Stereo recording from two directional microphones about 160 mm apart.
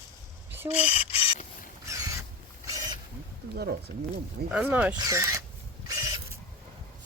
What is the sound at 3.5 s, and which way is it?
Speech, 90° right.